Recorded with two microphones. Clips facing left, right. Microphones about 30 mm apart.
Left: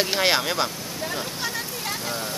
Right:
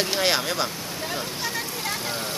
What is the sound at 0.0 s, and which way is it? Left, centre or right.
Speech, centre.